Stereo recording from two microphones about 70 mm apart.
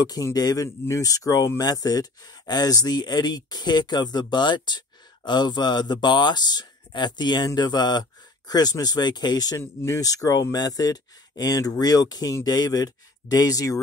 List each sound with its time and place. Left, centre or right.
0.0 s speech: left
0.8 s speech: left
1.6 s speech: left
7.4 s speech: left
9.9 s speech: left